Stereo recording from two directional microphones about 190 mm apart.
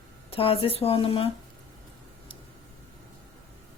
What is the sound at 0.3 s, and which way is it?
A woman's voice, 30° left (ahead or behind).